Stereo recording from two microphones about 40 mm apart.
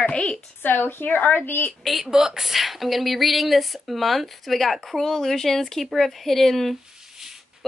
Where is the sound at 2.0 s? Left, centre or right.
Centre.